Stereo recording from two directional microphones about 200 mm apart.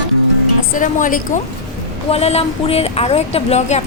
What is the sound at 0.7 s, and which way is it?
A woman's voice, 40° left (ahead or behind).